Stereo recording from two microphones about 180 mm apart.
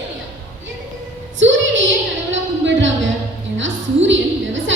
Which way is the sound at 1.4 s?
90° right.